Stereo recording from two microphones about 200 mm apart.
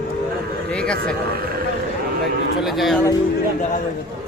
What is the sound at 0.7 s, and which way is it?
Speech, 5° left (ahead or behind).